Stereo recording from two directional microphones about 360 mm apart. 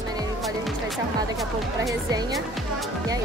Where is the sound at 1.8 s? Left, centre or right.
Centre.